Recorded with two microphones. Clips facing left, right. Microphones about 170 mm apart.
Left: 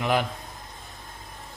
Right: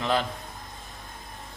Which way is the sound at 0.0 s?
15° left (ahead or behind).